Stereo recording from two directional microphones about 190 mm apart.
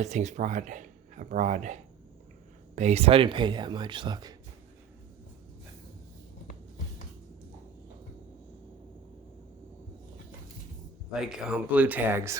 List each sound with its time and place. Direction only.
0.0 s speech: 40° right (ahead or behind); by 4.4 s 20° right (ahead or behind)
11.1 s speech: centre (ahead or behind)